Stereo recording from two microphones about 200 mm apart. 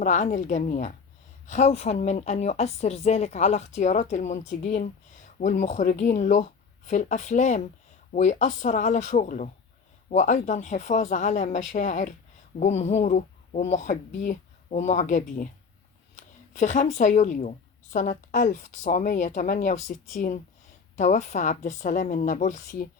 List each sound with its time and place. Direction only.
0.0 s a woman's voice: 40° left (ahead or behind)